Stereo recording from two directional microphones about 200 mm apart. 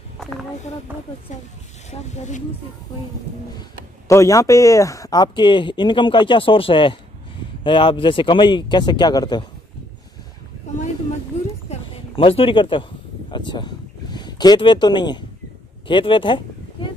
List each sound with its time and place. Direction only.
0.2 s a sound: centre (ahead or behind)
0.9 s speech: 10° right (ahead or behind)
1.9 s speech: 35° left (ahead or behind)
4.1 s speech: 15° left (ahead or behind)
11.7 s a sound: 25° left (ahead or behind)
15.9 s speech: 25° left (ahead or behind)